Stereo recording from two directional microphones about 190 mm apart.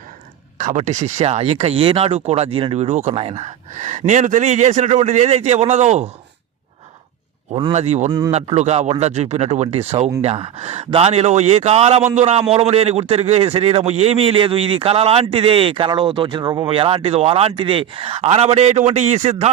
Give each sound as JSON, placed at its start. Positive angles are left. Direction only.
{"t": 0.6, "sound": "a man's voice", "side_deg": -40}
{"t": 7.7, "sound": "a man's voice", "side_deg": -35}